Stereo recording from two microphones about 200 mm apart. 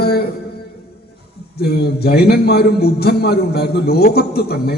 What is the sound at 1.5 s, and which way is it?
A man's voice, 50° left (ahead or behind).